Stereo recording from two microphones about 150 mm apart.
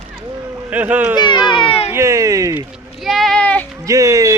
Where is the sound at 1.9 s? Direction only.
20° right (ahead or behind).